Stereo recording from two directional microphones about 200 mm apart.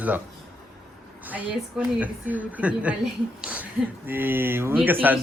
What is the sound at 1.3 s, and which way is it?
A man's voice, 10° right (ahead or behind).